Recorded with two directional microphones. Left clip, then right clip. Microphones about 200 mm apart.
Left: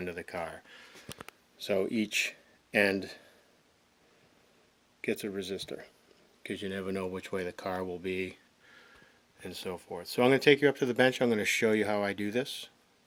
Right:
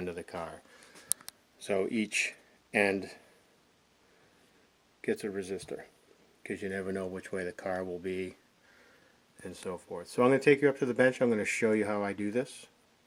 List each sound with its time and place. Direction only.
0.0 s speech: centre (ahead or behind)
1.6 s speech: 20° left (ahead or behind)
4.9 s speech: 20° left (ahead or behind)
6.9 s speech: 25° left (ahead or behind)
9.4 s speech: 10° left (ahead or behind)